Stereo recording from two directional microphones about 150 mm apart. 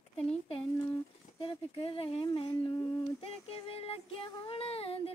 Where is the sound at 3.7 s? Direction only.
40° left (ahead or behind).